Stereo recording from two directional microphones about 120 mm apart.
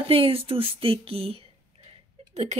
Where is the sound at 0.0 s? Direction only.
50° right (ahead or behind).